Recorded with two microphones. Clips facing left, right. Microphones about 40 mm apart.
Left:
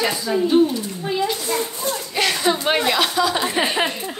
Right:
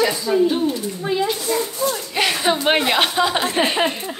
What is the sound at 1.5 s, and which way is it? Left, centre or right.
Speech, left.